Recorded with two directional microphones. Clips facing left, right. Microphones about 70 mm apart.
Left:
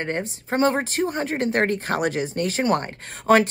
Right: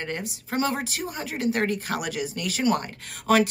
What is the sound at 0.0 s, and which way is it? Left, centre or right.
Speech, left.